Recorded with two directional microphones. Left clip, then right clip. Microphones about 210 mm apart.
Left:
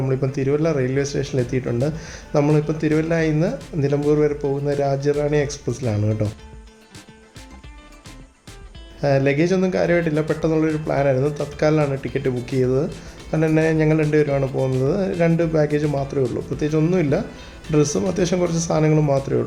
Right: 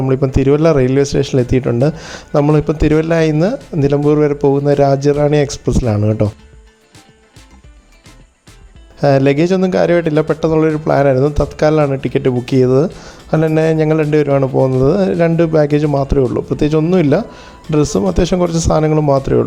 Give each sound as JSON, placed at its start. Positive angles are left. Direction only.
{"t": 0.0, "sound": "speech", "side_deg": -35}
{"t": 9.0, "sound": "speech", "side_deg": -35}